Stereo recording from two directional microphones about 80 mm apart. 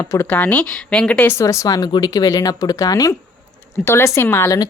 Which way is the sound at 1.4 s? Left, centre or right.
Left.